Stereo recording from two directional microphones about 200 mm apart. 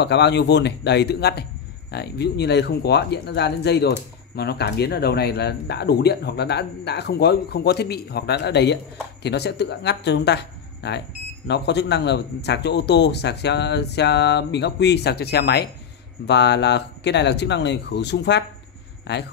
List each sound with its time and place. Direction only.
0.0 s speech: 55° left (ahead or behind)